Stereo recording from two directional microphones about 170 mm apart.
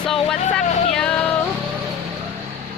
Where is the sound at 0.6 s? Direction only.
45° left (ahead or behind).